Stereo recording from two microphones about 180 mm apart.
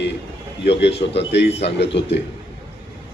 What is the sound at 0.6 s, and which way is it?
A man's voice, 75° left (ahead or behind).